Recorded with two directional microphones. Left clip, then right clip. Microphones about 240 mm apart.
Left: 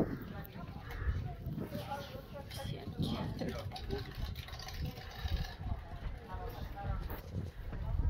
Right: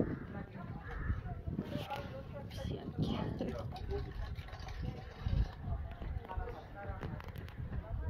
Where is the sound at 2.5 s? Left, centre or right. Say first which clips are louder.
Right 2 dB; centre.